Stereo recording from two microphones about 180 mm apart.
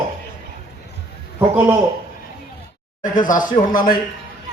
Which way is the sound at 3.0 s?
50° left (ahead or behind).